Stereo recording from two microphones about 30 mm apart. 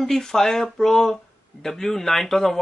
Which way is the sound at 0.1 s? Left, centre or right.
Centre.